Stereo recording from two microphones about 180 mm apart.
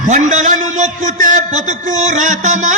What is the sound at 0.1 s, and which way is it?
A man's voice, 40° right (ahead or behind).